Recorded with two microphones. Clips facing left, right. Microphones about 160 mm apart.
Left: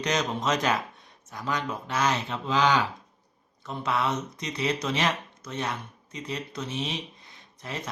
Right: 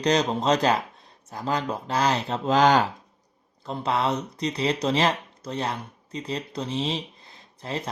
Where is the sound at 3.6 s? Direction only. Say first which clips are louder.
Right 3 dB; 30° right (ahead or behind).